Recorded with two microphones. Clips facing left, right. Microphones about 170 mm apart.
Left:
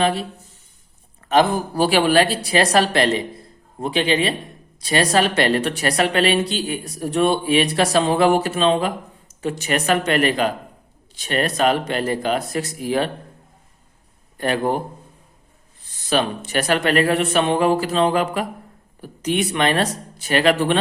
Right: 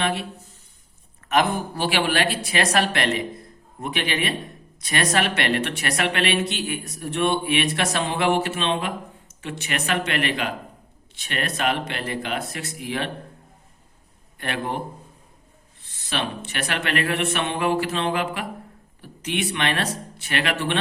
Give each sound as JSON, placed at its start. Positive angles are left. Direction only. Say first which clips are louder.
{"t": 0.0, "sound": "speech", "louder": "left 5 dB", "side_deg": 35}
{"t": 1.3, "sound": "a man's voice", "louder": "left 4 dB", "side_deg": 30}
{"t": 14.3, "sound": "speech", "louder": "left 8 dB", "side_deg": 35}
{"t": 15.8, "sound": "speech", "louder": "left 8 dB", "side_deg": 40}